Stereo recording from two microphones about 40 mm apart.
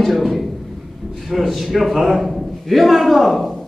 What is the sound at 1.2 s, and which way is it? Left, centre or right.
A man's voice, centre.